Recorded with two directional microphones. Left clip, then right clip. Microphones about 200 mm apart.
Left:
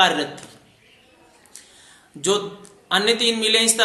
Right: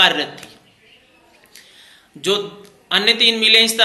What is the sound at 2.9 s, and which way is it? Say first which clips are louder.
Speech: right 4 dB; 20° left (ahead or behind).